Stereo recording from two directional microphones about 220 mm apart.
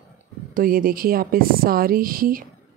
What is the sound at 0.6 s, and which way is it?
A woman's voice, 40° right (ahead or behind).